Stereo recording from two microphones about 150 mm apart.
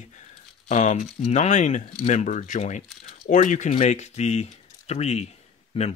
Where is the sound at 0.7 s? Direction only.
55° left (ahead or behind).